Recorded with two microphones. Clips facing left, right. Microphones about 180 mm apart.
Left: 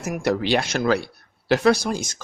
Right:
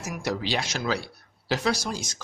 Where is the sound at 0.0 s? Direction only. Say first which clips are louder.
Left 7 dB; 55° left (ahead or behind).